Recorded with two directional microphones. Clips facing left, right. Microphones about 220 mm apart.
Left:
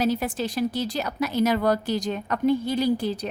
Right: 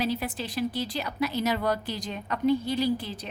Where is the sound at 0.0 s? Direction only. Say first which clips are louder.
Left 5 dB; 45° left (ahead or behind).